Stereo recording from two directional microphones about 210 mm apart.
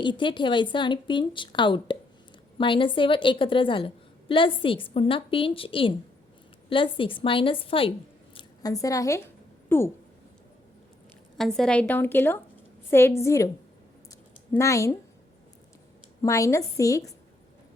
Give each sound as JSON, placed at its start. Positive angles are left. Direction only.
{"t": 0.0, "sound": "a woman's voice", "side_deg": 20}
{"t": 11.3, "sound": "a woman's voice", "side_deg": 0}
{"t": 14.5, "sound": "a woman's voice", "side_deg": 15}
{"t": 16.2, "sound": "a woman's voice", "side_deg": 15}